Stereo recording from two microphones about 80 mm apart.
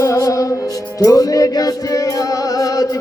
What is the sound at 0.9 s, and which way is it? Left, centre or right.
Music, left.